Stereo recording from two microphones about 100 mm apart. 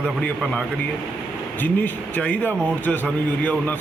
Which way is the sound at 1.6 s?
15° left (ahead or behind).